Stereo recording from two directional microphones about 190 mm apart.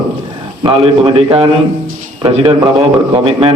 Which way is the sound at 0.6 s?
30° right (ahead or behind).